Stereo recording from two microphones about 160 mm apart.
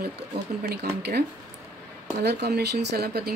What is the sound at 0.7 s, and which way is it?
A woman's voice, 90° right.